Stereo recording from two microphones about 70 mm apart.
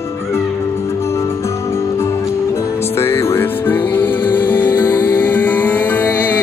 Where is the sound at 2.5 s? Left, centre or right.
Left.